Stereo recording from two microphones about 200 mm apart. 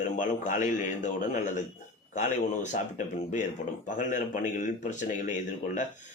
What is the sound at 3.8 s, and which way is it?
A man's voice, 40° left (ahead or behind).